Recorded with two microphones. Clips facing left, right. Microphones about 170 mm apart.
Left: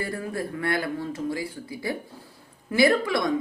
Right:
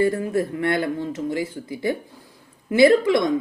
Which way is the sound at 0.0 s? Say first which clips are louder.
Right 9 dB; 25° right (ahead or behind).